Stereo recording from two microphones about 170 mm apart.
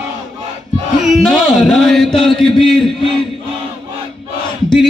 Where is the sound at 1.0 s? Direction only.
Centre (ahead or behind).